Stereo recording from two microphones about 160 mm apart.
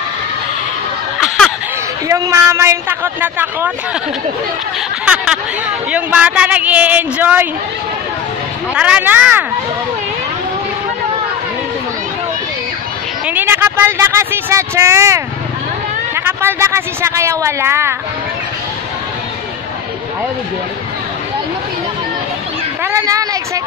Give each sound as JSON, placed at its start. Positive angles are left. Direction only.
{"t": 1.2, "sound": "a sound", "side_deg": 0}
{"t": 2.0, "sound": "a woman's voice", "side_deg": -20}
{"t": 5.0, "sound": "a woman's voice", "side_deg": -5}
{"t": 8.7, "sound": "a woman's voice", "side_deg": -5}
{"t": 13.3, "sound": "speech", "side_deg": -10}
{"t": 16.3, "sound": "a woman's voice", "side_deg": -15}
{"t": 22.8, "sound": "speech", "side_deg": -20}